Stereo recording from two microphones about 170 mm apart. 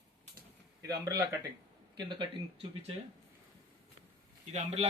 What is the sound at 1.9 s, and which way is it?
Speech, 25° right (ahead or behind).